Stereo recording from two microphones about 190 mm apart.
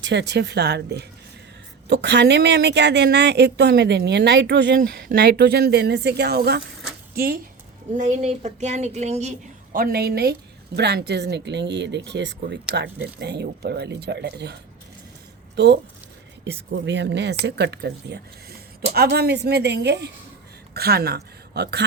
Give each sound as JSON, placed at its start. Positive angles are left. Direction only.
{"t": 0.0, "sound": "speech", "side_deg": -65}
{"t": 7.9, "sound": "speech", "side_deg": -35}
{"t": 9.7, "sound": "a woman's voice", "side_deg": -50}